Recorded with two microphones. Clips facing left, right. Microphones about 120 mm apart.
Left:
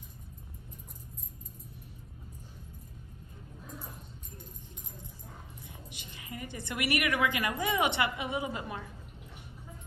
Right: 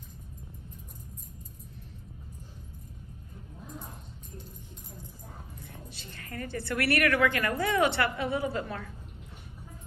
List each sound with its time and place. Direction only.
5.9 s a woman's voice: 15° left (ahead or behind)